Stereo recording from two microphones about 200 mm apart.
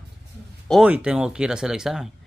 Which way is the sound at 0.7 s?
5° right (ahead or behind).